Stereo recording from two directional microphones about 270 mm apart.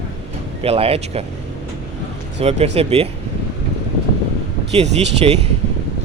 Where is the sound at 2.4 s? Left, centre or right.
Right.